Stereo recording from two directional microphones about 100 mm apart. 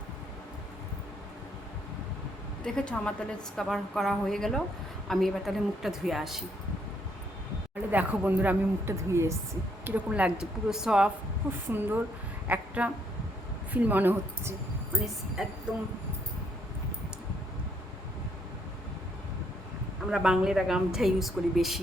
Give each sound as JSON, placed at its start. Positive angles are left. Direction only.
{"t": 2.6, "sound": "a woman's voice", "side_deg": 10}
{"t": 7.9, "sound": "a woman's voice", "side_deg": -15}
{"t": 9.8, "sound": "a woman's voice", "side_deg": -15}
{"t": 11.7, "sound": "a woman's voice", "side_deg": -20}
{"t": 15.4, "sound": "a woman's voice", "side_deg": -5}
{"t": 20.1, "sound": "a woman's voice", "side_deg": -5}